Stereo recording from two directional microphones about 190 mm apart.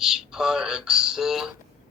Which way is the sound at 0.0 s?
5° right (ahead or behind).